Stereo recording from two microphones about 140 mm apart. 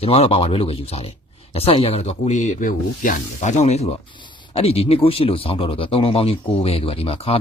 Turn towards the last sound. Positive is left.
turn(degrees=45)  # may be behind; listen again after turning